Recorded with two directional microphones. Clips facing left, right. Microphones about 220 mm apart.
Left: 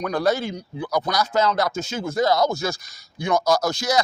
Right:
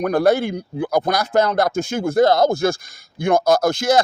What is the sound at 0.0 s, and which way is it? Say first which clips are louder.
Speech: right 6 dB; 55° right (ahead or behind).